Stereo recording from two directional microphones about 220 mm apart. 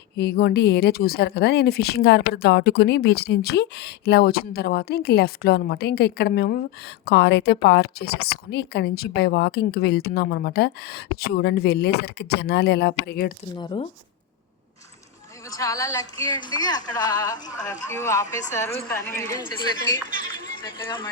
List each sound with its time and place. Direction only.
0.2 s speech: 45° left (ahead or behind)
13.6 s speech: 20° left (ahead or behind)
15.4 s a woman's voice: 15° left (ahead or behind)